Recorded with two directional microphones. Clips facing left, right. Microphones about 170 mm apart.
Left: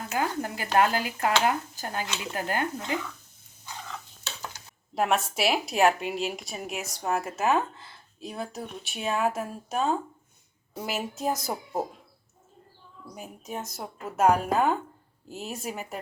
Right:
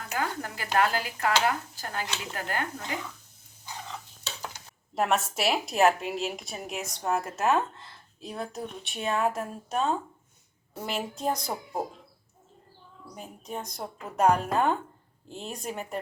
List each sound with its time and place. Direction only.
0.1 s speech: 20° left (ahead or behind)
4.9 s a woman's voice: centre (ahead or behind)
13.1 s a woman's voice: 5° left (ahead or behind)